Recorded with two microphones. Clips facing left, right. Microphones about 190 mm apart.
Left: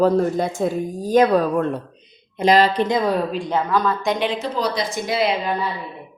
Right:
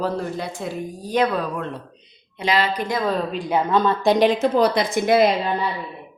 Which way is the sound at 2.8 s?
15° left (ahead or behind).